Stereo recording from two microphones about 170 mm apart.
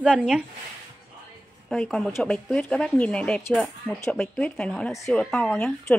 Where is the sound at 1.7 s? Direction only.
5° left (ahead or behind).